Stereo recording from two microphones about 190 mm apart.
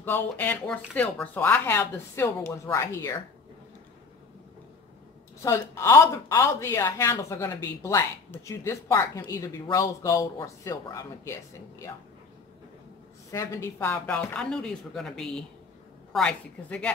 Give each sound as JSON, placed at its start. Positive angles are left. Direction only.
{"t": 0.0, "sound": "speech", "side_deg": 10}
{"t": 5.4, "sound": "speech", "side_deg": 15}
{"t": 13.3, "sound": "speech", "side_deg": 15}